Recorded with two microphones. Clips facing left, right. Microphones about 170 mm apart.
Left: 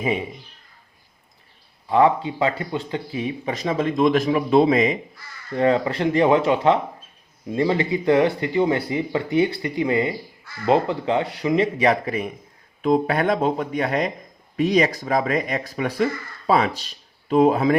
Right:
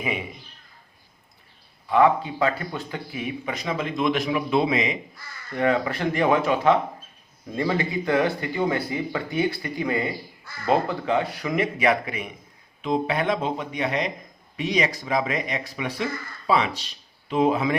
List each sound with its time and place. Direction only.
0.0 s speech: 35° left (ahead or behind)
1.9 s speech: 30° left (ahead or behind)
5.5 s speech: 30° left (ahead or behind)
12.8 s speech: 50° left (ahead or behind)